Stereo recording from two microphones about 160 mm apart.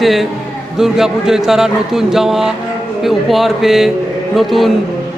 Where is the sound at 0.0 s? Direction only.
Centre (ahead or behind).